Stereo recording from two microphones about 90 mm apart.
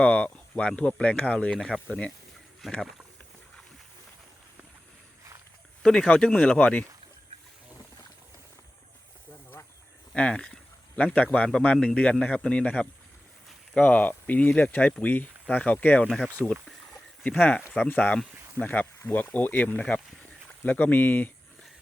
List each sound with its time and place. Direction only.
0.0 s speech: 15° left (ahead or behind)
5.8 s speech: 10° left (ahead or behind)
10.2 s a man's voice: 10° left (ahead or behind)
16.0 s speech: 5° left (ahead or behind)
17.2 s speech: 15° left (ahead or behind)